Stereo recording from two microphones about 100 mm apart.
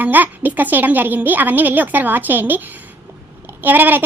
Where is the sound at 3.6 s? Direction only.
20° right (ahead or behind).